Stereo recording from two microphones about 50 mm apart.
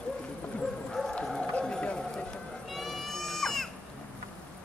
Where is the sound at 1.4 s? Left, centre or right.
Centre.